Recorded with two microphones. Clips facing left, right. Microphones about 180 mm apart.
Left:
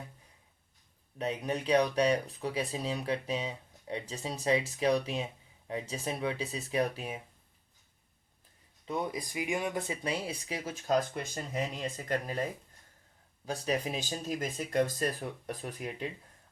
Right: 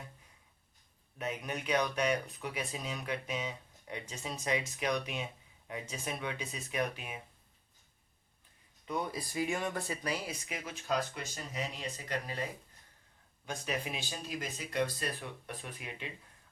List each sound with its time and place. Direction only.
1.2 s speech: 30° left (ahead or behind)
8.9 s speech: 20° left (ahead or behind); by 12.4 s 45° left (ahead or behind)
13.4 s speech: 35° left (ahead or behind)